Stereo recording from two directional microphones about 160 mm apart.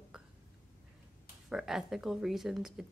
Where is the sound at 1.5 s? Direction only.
5° right (ahead or behind).